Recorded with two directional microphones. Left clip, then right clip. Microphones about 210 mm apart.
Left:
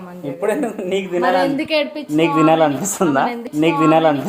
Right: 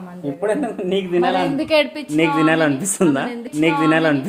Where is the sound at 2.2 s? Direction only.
10° left (ahead or behind).